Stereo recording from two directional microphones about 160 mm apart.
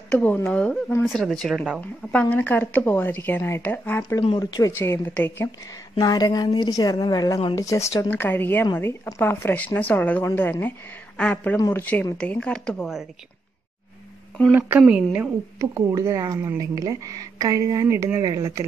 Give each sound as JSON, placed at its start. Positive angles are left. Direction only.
{"t": 0.1, "sound": "a woman's voice", "side_deg": 10}
{"t": 1.8, "sound": "a woman's voice", "side_deg": 10}
{"t": 5.9, "sound": "a woman's voice", "side_deg": 25}
{"t": 14.5, "sound": "a woman's voice", "side_deg": -10}